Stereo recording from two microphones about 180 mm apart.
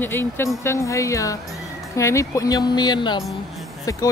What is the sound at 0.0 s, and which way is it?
Speech, 10° left (ahead or behind).